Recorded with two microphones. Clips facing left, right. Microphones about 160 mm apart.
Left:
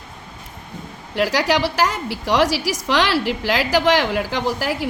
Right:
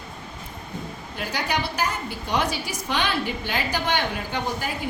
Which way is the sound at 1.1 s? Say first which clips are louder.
Left 9 dB; 90° left.